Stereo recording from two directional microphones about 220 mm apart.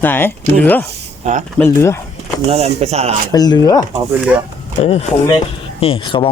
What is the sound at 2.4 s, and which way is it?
Speech, 30° right (ahead or behind).